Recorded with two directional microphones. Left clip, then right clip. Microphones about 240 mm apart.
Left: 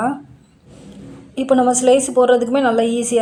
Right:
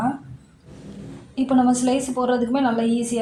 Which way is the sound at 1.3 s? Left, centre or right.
Left.